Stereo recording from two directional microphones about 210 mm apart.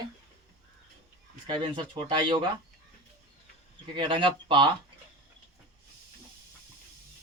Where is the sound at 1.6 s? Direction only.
25° right (ahead or behind).